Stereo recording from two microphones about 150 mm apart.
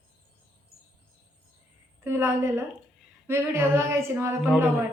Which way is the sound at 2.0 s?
15° right (ahead or behind).